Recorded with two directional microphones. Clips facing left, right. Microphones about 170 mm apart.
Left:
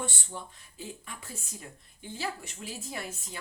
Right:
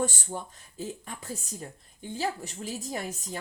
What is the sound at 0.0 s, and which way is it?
Speech, 40° right (ahead or behind).